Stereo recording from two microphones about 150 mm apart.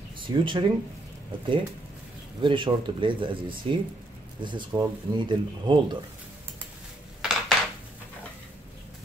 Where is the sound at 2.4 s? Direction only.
35° right (ahead or behind).